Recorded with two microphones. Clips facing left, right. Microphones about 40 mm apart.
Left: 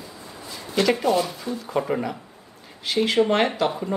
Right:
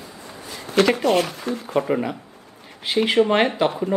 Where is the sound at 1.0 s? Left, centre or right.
Right.